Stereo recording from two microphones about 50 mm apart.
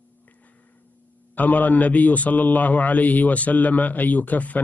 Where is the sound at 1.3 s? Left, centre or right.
Left.